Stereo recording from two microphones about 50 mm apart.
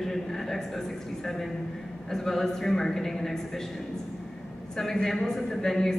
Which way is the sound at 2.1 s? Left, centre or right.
Centre.